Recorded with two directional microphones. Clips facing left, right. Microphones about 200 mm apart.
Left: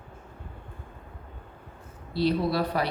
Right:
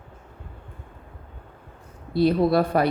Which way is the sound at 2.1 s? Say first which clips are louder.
Right 6 dB; 50° right (ahead or behind).